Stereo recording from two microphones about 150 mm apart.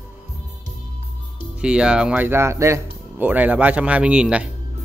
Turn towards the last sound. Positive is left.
turn(degrees=-5)  # may be behind; listen again after turning